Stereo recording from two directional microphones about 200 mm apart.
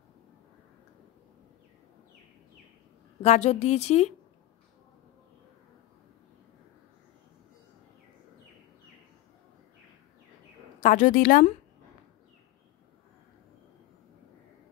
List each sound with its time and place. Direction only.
3.2 s a woman's voice: 35° left (ahead or behind)
10.8 s a woman's voice: 40° left (ahead or behind)